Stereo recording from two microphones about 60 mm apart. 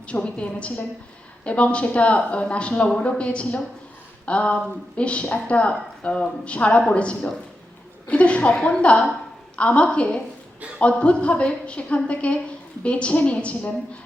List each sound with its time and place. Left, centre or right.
0.3 s a woman's voice: centre